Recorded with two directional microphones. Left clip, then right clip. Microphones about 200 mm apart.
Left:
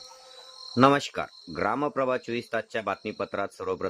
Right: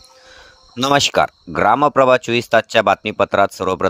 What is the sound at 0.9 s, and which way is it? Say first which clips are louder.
Speech: right 13 dB; 50° right (ahead or behind).